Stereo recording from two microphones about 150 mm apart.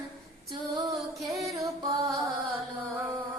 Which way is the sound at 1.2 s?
Centre (ahead or behind).